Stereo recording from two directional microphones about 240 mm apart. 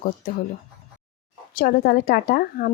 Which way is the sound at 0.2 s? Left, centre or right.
Left.